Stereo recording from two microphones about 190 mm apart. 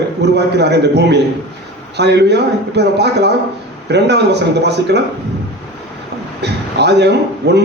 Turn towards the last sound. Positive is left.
turn(degrees=-65)  # may be behind; listen again after turning